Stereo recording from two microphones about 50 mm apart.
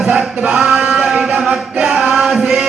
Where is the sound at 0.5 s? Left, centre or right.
Centre.